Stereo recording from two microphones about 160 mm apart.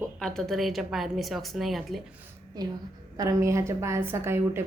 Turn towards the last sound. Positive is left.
turn(degrees=-15)  # may be behind; listen again after turning